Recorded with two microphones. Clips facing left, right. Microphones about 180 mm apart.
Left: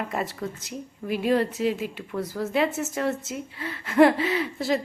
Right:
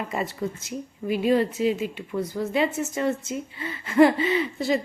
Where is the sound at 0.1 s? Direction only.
Centre (ahead or behind).